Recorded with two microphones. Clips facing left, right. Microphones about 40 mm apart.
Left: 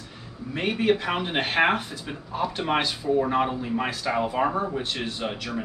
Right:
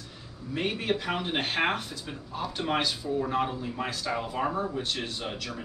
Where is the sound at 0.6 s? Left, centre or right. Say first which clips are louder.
Left 6 dB; centre.